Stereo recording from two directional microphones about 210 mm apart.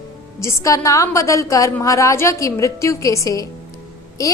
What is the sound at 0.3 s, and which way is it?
A woman's voice, 15° left (ahead or behind).